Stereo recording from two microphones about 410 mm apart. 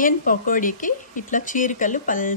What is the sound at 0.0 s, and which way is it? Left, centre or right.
Speech, centre.